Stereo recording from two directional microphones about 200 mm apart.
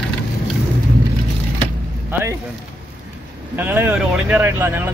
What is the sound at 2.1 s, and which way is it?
Speech, 15° right (ahead or behind).